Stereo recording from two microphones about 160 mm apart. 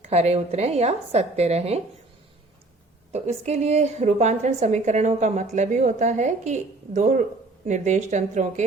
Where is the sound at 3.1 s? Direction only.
45° right (ahead or behind).